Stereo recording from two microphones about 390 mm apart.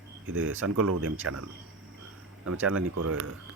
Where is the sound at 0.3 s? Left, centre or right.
Right.